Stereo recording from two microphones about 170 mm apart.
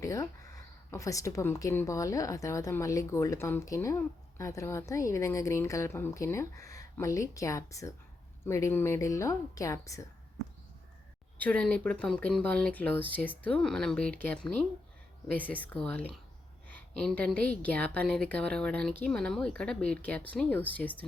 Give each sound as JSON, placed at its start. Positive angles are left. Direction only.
{"t": 0.0, "sound": "a woman's voice", "side_deg": 20}
{"t": 11.3, "sound": "a woman's voice", "side_deg": 10}